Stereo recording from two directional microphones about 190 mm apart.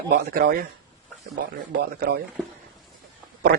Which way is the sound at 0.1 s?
50° right (ahead or behind).